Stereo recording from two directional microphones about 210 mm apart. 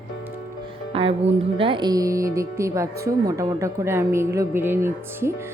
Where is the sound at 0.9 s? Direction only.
25° right (ahead or behind).